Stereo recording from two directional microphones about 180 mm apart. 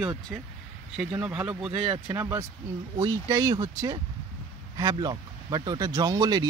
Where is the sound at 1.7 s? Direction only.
30° right (ahead or behind).